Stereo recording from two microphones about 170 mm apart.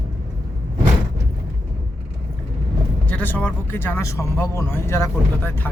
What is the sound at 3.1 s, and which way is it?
Speech, 10° left (ahead or behind).